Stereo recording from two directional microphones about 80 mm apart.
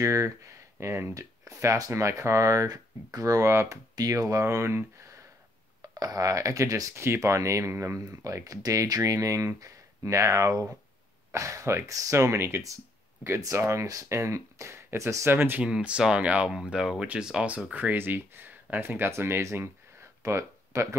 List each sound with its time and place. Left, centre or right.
0.0 s speech: right
3.9 s speech: right
5.8 s speech: right
15.6 s speech: centre
17.8 s speech: right